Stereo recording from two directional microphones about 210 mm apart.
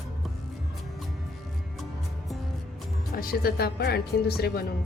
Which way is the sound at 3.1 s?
45° left (ahead or behind).